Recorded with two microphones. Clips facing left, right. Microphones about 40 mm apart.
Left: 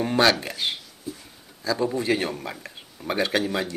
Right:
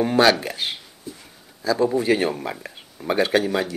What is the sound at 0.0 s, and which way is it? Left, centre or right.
Speech, centre.